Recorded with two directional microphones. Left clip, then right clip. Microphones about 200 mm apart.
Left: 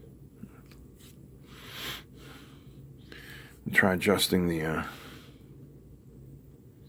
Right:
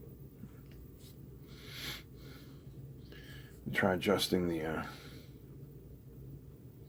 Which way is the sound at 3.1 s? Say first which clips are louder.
Left 8 dB; 35° left (ahead or behind).